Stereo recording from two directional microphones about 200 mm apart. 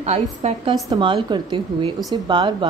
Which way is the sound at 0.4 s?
30° right (ahead or behind).